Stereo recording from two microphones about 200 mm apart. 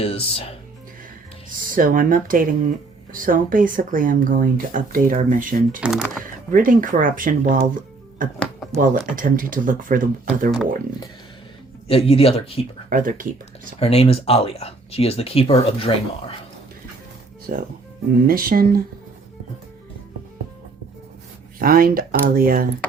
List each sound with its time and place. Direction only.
0.0 s speech: 30° left (ahead or behind)
1.5 s speech: 40° right (ahead or behind)
5.8 s speech: 5° right (ahead or behind)
6.5 s speech: 45° right (ahead or behind)
11.9 s speech: 30° left (ahead or behind)
12.9 s speech: 40° right (ahead or behind)
13.7 s speech: 30° left (ahead or behind)
17.5 s speech: 45° right (ahead or behind)
21.6 s speech: 45° right (ahead or behind)